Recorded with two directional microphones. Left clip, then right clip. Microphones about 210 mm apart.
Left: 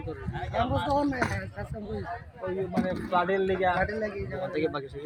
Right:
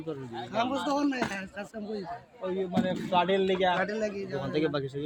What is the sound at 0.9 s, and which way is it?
Speech, 10° right (ahead or behind).